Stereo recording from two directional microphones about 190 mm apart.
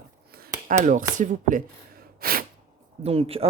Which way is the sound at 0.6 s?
40° right (ahead or behind).